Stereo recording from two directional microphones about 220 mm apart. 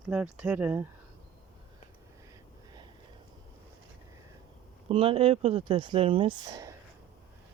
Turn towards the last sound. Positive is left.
turn(degrees=-15)  # may be behind; listen again after turning